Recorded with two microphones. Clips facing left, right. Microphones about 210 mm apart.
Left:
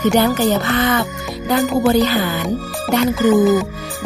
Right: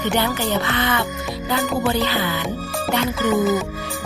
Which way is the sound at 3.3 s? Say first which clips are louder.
Left 6 dB; centre (ahead or behind).